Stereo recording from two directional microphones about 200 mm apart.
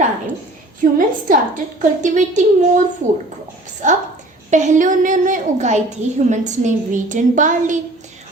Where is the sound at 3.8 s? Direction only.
40° right (ahead or behind).